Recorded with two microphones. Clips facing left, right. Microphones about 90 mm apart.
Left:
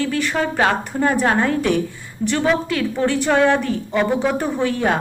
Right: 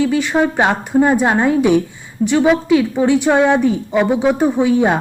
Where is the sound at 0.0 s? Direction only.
15° right (ahead or behind).